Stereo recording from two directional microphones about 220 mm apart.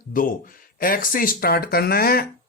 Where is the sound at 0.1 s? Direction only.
40° left (ahead or behind).